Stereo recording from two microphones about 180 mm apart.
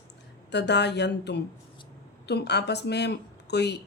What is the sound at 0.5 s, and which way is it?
Speech, 70° left (ahead or behind).